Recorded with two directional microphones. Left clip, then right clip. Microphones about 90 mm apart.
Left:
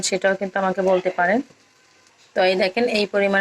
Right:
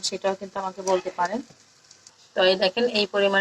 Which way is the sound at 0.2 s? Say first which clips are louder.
Left 8 dB; 35° left (ahead or behind).